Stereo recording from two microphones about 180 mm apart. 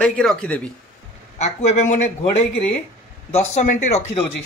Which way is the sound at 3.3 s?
40° left (ahead or behind).